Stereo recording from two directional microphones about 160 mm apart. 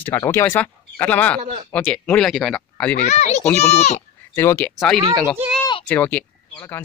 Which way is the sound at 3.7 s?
45° left (ahead or behind).